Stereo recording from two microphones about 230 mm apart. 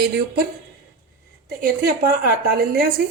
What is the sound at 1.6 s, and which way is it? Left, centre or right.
Speech, right.